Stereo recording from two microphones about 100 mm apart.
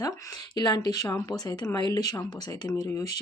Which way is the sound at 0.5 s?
45° left (ahead or behind).